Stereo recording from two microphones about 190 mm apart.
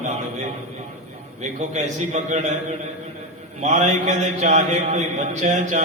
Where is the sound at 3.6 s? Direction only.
35° right (ahead or behind).